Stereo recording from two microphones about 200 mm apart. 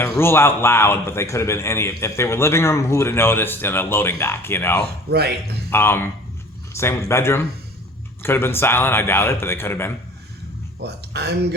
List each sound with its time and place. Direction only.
0.2 s a man's voice: 10° left (ahead or behind)
10.8 s speech: 55° right (ahead or behind)